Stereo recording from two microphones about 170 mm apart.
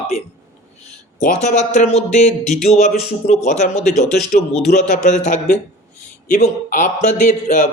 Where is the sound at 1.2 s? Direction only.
50° left (ahead or behind).